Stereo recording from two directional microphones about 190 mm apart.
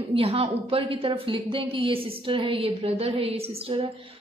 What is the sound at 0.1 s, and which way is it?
A woman's voice, 30° right (ahead or behind).